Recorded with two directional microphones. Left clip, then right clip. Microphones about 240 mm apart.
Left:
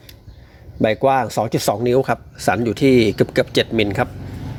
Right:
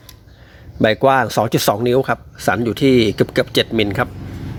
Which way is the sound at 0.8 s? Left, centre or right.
Centre.